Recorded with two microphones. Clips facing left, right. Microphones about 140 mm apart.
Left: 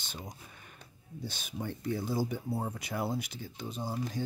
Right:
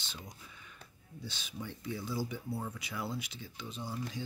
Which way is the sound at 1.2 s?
50° left (ahead or behind).